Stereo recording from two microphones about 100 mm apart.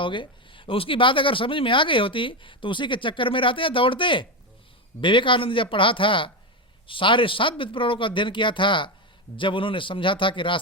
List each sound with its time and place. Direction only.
0.0 s speech: 55° left (ahead or behind)